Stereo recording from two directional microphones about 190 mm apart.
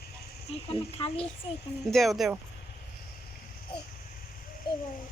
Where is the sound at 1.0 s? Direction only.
30° left (ahead or behind).